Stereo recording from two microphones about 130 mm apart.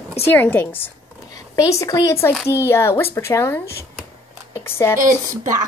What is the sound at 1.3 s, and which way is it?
Speech, 25° left (ahead or behind).